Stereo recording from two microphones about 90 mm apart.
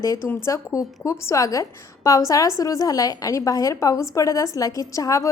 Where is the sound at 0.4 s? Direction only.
35° left (ahead or behind).